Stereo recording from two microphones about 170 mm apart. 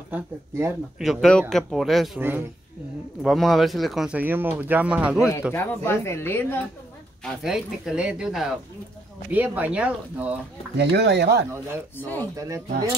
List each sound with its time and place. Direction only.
0.1 s speech: 15° right (ahead or behind)
0.9 s speech: centre (ahead or behind)
2.1 s speech: 10° right (ahead or behind)
3.2 s speech: centre (ahead or behind)
5.5 s speech: 15° left (ahead or behind)
7.2 s speech: 5° right (ahead or behind)
10.8 s speech: 80° right
12.4 s speech: 20° right (ahead or behind)